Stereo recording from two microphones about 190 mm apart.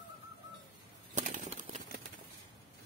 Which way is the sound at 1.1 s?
40° right (ahead or behind).